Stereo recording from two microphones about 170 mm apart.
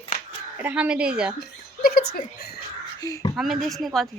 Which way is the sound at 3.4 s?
Centre (ahead or behind).